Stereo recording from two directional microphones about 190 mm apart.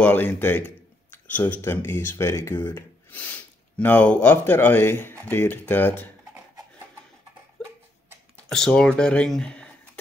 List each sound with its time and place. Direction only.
0.0 s speech: 10° left (ahead or behind)
8.5 s speech: 5° left (ahead or behind)